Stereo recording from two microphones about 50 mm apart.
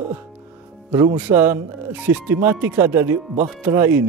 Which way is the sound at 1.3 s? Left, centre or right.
Right.